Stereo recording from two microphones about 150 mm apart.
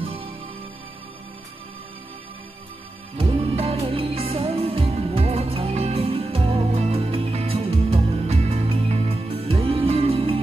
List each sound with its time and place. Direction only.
0.0 s music: 40° right (ahead or behind)
3.2 s music: 40° right (ahead or behind)